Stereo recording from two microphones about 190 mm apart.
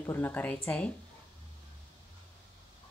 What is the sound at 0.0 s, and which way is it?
Speech, 10° left (ahead or behind).